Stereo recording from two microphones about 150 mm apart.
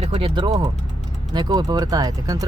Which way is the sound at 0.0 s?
40° right (ahead or behind).